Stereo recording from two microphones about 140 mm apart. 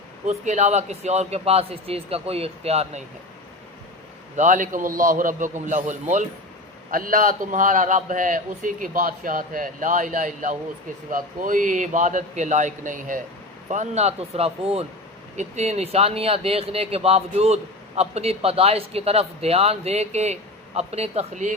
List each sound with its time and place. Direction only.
0.3 s speech: 55° right (ahead or behind)
4.4 s speech: 65° right (ahead or behind)
6.9 s speech: 85° right
13.7 s speech: 55° right (ahead or behind)